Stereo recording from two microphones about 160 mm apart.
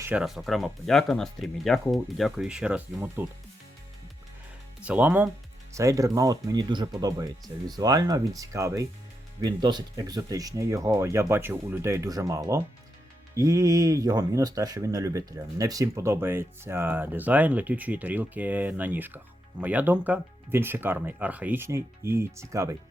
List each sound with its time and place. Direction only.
0.0 s speech: 5° right (ahead or behind)
4.8 s speech: 10° right (ahead or behind)